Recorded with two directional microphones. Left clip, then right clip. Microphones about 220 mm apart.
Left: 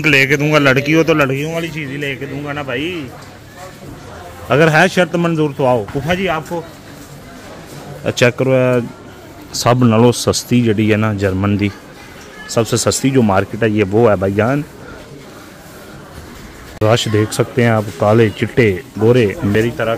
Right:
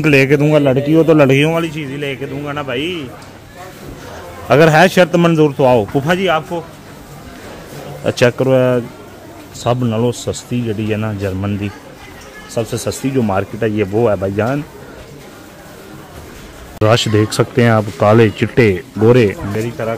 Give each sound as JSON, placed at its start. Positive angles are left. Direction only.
{"t": 0.0, "sound": "a man's voice", "side_deg": -25}
{"t": 1.5, "sound": "speech", "side_deg": -30}
{"t": 4.5, "sound": "a man's voice", "side_deg": -15}
{"t": 8.0, "sound": "speech", "side_deg": 0}
{"t": 9.6, "sound": "speech", "side_deg": 20}
{"t": 16.8, "sound": "speech", "side_deg": -5}
{"t": 19.8, "sound": "speech", "side_deg": 10}